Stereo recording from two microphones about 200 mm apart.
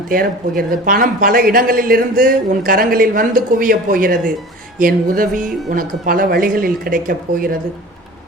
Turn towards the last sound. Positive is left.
turn(degrees=-45)  # may be behind; listen again after turning